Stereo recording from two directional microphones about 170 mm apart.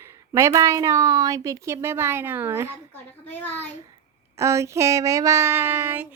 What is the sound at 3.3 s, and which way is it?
Speech, 10° left (ahead or behind).